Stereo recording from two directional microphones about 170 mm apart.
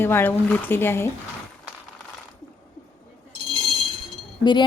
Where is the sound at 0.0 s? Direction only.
15° left (ahead or behind).